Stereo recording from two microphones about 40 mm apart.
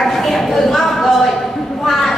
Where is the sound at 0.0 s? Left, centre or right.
Centre.